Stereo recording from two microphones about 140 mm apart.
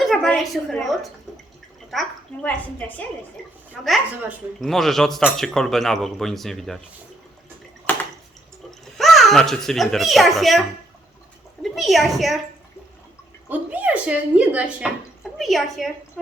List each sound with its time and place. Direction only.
0.0 s a woman's voice: centre (ahead or behind)
1.9 s a sound: centre (ahead or behind)
2.7 s a woman's voice: 10° left (ahead or behind)
3.8 s speech: centre (ahead or behind)
7.9 s drip: 15° left (ahead or behind)
9.0 s a child's voice: centre (ahead or behind)
13.5 s a woman's voice: 10° right (ahead or behind)